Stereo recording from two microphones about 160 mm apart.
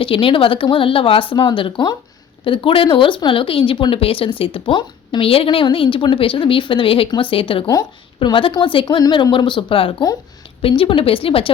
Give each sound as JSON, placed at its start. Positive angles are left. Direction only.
{"t": 0.0, "sound": "speech", "side_deg": 35}